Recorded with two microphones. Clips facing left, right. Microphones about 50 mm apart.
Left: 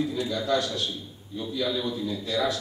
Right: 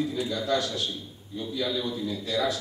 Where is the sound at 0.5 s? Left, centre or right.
Centre.